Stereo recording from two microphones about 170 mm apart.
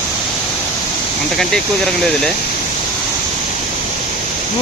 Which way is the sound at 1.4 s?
5° left (ahead or behind).